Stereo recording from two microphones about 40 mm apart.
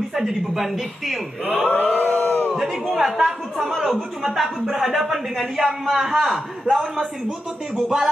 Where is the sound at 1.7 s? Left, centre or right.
Left.